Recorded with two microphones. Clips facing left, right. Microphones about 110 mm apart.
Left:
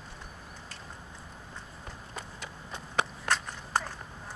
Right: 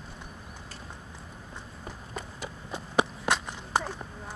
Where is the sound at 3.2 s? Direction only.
20° right (ahead or behind).